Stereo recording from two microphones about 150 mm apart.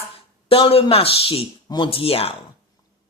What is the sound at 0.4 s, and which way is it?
Speech, 40° left (ahead or behind).